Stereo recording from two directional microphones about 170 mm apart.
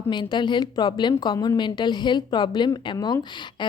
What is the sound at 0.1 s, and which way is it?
A woman's voice, 25° left (ahead or behind).